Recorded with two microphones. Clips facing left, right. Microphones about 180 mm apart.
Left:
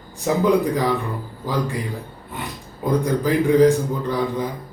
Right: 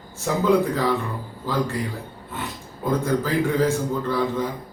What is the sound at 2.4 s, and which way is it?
A man's voice, 15° left (ahead or behind).